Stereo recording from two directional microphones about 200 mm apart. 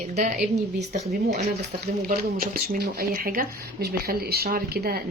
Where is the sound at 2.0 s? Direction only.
45° right (ahead or behind).